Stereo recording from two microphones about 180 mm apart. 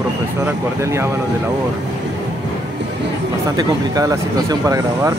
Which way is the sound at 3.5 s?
20° right (ahead or behind).